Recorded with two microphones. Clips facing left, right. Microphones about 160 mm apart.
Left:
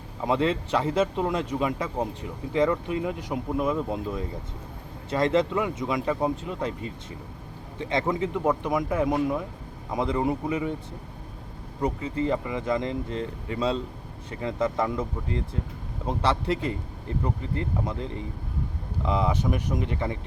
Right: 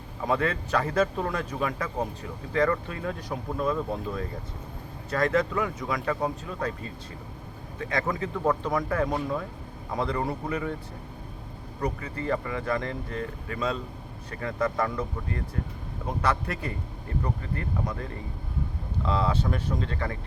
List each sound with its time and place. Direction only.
0.3 s speech: 20° left (ahead or behind)
11.8 s speech: 20° left (ahead or behind)